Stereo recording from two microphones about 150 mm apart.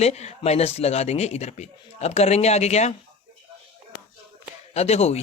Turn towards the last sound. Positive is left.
turn(degrees=45)  # may be behind; listen again after turning